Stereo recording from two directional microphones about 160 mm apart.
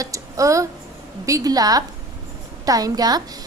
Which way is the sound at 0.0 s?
20° right (ahead or behind).